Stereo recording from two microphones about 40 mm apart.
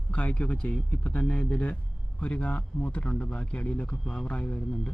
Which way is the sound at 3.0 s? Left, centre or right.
Left.